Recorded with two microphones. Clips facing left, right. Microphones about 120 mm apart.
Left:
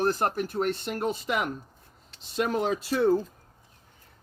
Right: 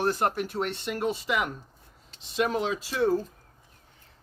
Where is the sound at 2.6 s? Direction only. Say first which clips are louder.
Left 2 dB; 50° left (ahead or behind).